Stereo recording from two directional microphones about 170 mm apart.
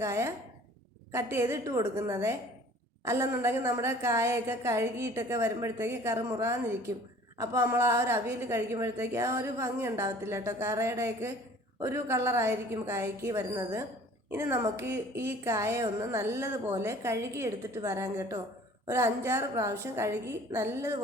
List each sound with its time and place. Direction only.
0.0 s a woman's voice: 15° right (ahead or behind)